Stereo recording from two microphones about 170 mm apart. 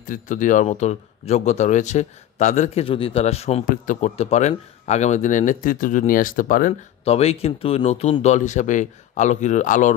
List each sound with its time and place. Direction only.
0.0 s speech: 50° left (ahead or behind)
3.6 s speech: 50° left (ahead or behind)
7.1 s speech: 35° left (ahead or behind)